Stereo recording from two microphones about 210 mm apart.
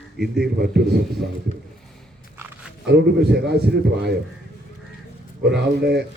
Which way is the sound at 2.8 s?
50° right (ahead or behind).